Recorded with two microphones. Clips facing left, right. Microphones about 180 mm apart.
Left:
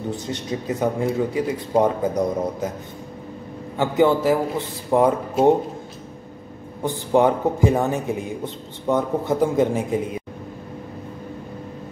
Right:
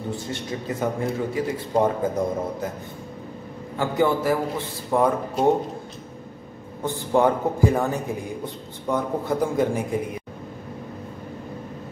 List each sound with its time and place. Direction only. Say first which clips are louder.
0.1 s speech: left 3 dB; 20° left (ahead or behind)
3.7 s speech: left 4 dB; 20° left (ahead or behind)
6.8 s speech: left 2 dB; 20° left (ahead or behind)